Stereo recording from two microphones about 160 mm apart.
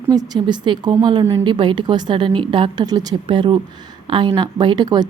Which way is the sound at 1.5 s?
30° right (ahead or behind).